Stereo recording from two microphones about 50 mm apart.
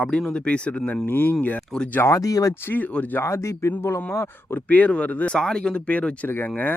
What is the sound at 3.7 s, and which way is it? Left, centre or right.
Speech, left.